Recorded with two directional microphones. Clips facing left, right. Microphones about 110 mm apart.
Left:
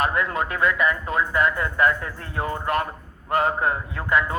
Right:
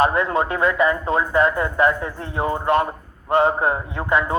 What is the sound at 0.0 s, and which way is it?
Speech, 25° right (ahead or behind).